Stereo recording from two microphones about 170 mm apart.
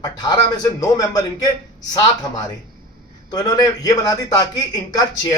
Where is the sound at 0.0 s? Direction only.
25° left (ahead or behind).